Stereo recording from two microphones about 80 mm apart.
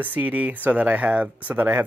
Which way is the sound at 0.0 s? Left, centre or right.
Right.